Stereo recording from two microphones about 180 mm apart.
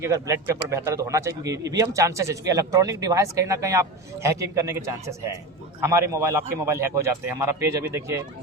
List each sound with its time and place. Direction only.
0.0 s speech: 15° right (ahead or behind)